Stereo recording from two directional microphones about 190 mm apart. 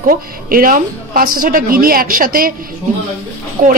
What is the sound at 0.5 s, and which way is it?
A woman's voice, 50° right (ahead or behind).